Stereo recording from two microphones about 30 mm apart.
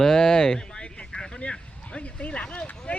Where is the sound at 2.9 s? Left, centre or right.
Left.